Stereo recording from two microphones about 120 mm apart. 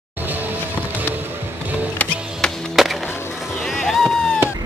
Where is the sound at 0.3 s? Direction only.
15° right (ahead or behind).